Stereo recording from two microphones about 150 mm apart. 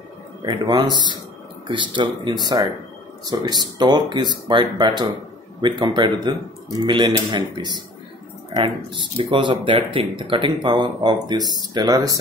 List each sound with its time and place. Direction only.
0.5 s speech: 30° right (ahead or behind)